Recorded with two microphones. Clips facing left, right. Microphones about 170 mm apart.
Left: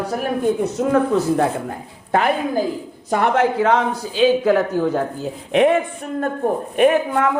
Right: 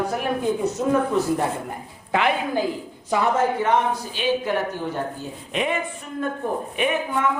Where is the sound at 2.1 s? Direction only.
45° left (ahead or behind).